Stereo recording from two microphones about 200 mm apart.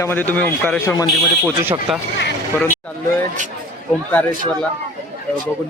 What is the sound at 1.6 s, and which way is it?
Speech, 10° right (ahead or behind).